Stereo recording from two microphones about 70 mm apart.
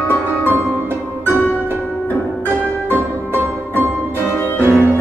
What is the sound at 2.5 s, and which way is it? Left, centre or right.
Music, centre.